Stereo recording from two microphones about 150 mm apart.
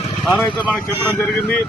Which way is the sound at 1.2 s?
10° left (ahead or behind).